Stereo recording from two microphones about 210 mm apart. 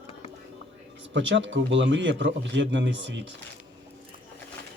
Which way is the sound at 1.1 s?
60° right (ahead or behind).